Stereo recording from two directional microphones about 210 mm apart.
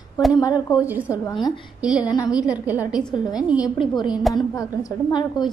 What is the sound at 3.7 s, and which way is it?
A woman's voice, 20° left (ahead or behind).